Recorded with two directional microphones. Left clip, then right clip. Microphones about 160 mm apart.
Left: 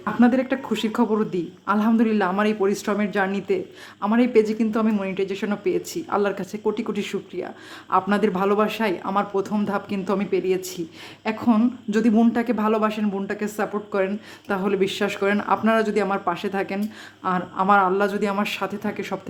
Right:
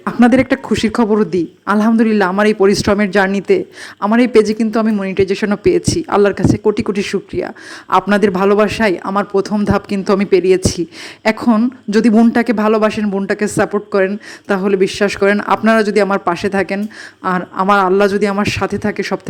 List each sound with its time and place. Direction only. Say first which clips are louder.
0.0 s speech: right 8 dB; 45° right (ahead or behind)
12.3 s speech: right 9 dB; 45° right (ahead or behind)